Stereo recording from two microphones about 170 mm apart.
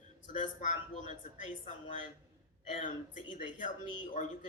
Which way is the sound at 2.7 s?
50° left (ahead or behind).